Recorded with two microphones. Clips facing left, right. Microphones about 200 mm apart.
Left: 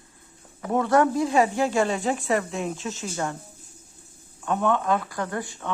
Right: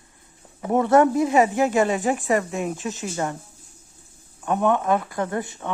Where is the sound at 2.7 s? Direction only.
15° right (ahead or behind).